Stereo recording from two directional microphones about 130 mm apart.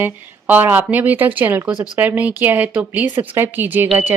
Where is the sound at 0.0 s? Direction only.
15° right (ahead or behind).